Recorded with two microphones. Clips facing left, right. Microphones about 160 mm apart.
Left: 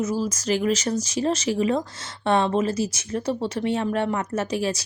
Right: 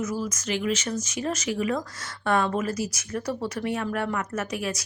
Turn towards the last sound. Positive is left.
turn(degrees=30)  # may be behind; listen again after turning